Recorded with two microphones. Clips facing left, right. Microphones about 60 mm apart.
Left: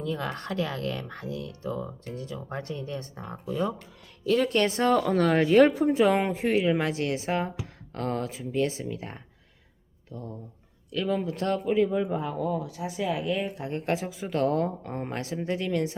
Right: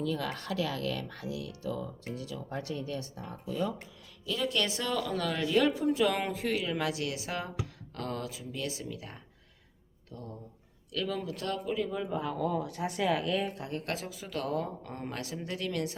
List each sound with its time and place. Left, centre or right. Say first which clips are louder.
0.0 s a woman's voice: left 2 dB; left
4.3 s a woman's voice: left 8 dB; left
10.1 s speech: left 5 dB; left
12.4 s speech: left 2 dB; centre; by 14.7 s left
14.8 s speech: left 6 dB; left